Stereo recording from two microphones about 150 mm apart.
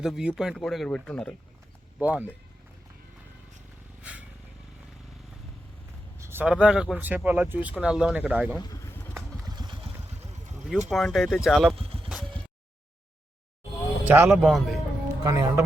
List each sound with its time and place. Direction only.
0.0 s speech: 5° right (ahead or behind)
2.0 s speech: 10° right (ahead or behind)
4.1 s vehicle: 10° right (ahead or behind)
6.1 s speech: 15° right (ahead or behind)
9.1 s vehicle: 30° right (ahead or behind)
10.7 s speech: centre (ahead or behind)
11.7 s vehicle: 40° right (ahead or behind)
14.0 s speech: 10° right (ahead or behind)
15.2 s speech: 20° right (ahead or behind)